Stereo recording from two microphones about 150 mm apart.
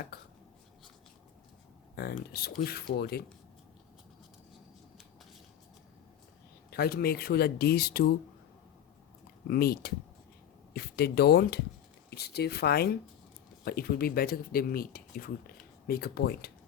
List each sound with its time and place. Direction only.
0.1 s a sound: 90° left
2.0 s speech: 90° left
6.7 s speech: 90° left
9.5 s speech: 90° left